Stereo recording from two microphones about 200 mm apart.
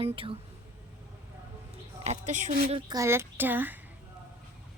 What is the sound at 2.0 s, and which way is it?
Speech, 35° right (ahead or behind).